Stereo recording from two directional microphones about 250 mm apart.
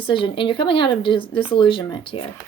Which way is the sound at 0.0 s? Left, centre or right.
Centre.